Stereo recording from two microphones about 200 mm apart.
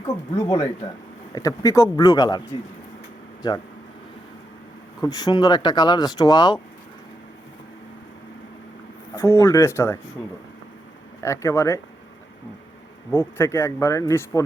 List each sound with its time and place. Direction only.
0.3 s speech: 15° left (ahead or behind)
3.4 s speech: 20° left (ahead or behind)
4.9 s speech: 20° left (ahead or behind)
9.1 s speech: 15° left (ahead or behind)
11.2 s speech: 15° left (ahead or behind)
13.1 s speech: 10° left (ahead or behind)